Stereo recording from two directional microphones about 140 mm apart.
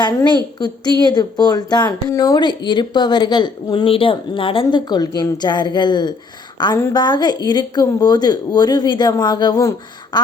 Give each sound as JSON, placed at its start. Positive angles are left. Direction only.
{"t": 0.0, "sound": "a woman's voice", "side_deg": 30}